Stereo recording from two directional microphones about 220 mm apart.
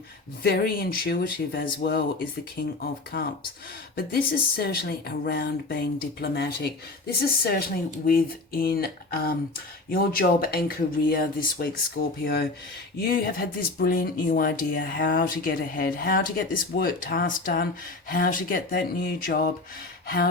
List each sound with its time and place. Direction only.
0.4 s speech: 45° left (ahead or behind)